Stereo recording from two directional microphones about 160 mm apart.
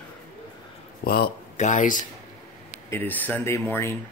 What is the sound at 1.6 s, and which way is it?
Speech, 50° left (ahead or behind).